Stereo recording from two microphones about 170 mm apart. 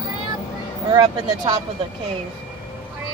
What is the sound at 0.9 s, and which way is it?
Speech, 30° right (ahead or behind).